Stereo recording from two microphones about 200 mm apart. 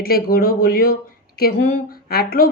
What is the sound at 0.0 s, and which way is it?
A woman's voice, 50° left (ahead or behind).